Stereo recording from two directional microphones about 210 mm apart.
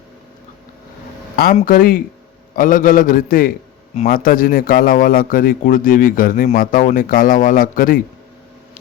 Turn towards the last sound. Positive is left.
turn(degrees=40)  # may be behind; listen again after turning